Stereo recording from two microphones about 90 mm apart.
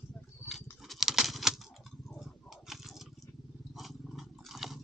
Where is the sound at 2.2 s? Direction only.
5° right (ahead or behind).